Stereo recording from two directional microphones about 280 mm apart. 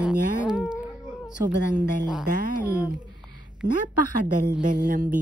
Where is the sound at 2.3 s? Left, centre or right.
Right.